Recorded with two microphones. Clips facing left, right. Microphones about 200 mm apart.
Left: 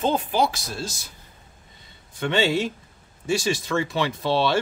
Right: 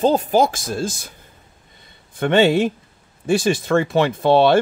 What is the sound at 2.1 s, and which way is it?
Speech, 55° right (ahead or behind).